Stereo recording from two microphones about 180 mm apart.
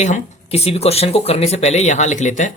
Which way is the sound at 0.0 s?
40° left (ahead or behind).